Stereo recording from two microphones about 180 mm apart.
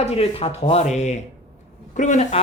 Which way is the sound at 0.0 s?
35° left (ahead or behind).